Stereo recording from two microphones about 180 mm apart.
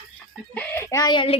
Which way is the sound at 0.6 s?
10° left (ahead or behind).